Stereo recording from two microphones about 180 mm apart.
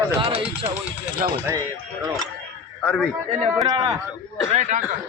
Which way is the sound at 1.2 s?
50° right (ahead or behind).